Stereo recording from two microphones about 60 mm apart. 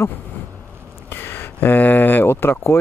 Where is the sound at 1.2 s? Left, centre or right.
Left.